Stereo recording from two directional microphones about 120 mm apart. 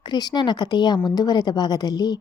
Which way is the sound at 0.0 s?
35° left (ahead or behind).